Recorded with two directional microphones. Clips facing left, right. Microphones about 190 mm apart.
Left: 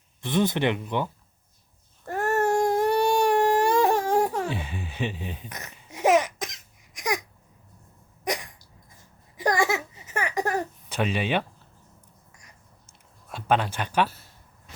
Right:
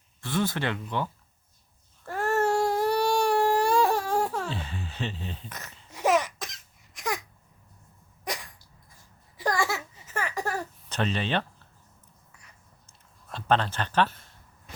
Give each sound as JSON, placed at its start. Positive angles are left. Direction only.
{"t": 0.2, "sound": "speech", "side_deg": 20}
{"t": 2.0, "sound": "babbling", "side_deg": 45}
{"t": 2.9, "sound": "baby cry", "side_deg": 20}
{"t": 8.2, "sound": "hiccup", "side_deg": 20}
{"t": 9.0, "sound": "a sound", "side_deg": 20}
{"t": 13.3, "sound": "speech", "side_deg": 10}